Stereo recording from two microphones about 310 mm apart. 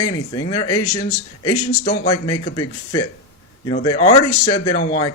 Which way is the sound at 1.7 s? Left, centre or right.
Left.